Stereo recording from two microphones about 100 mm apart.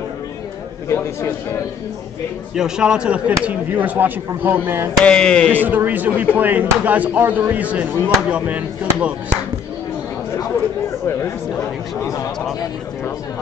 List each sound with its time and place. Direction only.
0.8 s a man's voice: 25° left (ahead or behind)
2.5 s speech: 10° right (ahead or behind)
5.0 s a sound: 10° left (ahead or behind)
5.5 s speech: 15° right (ahead or behind)